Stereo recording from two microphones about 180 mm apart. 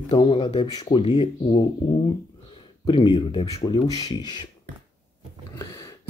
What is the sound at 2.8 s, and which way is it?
Speech, 25° left (ahead or behind).